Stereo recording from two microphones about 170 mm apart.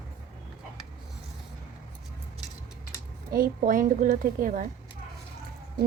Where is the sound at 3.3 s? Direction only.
55° right (ahead or behind).